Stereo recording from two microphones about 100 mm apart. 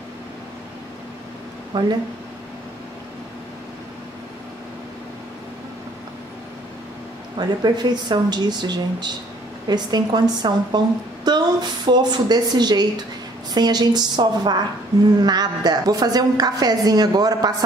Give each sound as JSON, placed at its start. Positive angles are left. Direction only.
{"t": 1.7, "sound": "speech", "side_deg": -50}
{"t": 7.3, "sound": "a woman's voice", "side_deg": -45}